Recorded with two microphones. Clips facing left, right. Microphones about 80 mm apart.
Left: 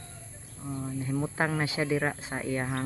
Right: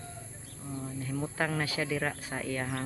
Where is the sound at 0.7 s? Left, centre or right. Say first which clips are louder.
Left 4 dB; centre.